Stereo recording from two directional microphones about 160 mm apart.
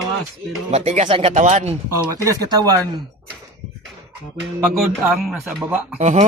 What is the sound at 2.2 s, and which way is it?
Speech, 20° right (ahead or behind).